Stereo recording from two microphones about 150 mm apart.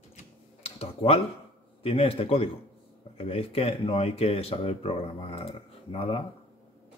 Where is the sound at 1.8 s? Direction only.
40° left (ahead or behind).